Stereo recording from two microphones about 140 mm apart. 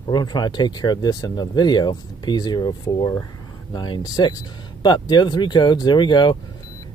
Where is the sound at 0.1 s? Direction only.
30° left (ahead or behind).